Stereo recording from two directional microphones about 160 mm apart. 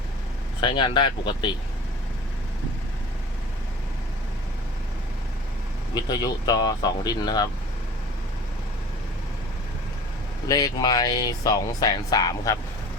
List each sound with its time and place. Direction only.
0.6 s speech: 30° left (ahead or behind)
5.9 s speech: 25° left (ahead or behind)
10.5 s speech: 25° left (ahead or behind)